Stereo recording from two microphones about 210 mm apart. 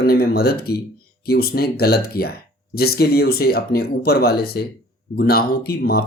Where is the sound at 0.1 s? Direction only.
45° left (ahead or behind).